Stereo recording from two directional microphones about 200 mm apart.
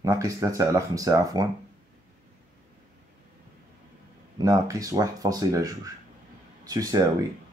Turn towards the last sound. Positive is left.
turn(degrees=-20)  # may be behind; listen again after turning